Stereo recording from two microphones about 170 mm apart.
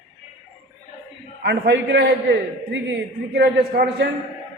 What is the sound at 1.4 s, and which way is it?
Speech, 90° right.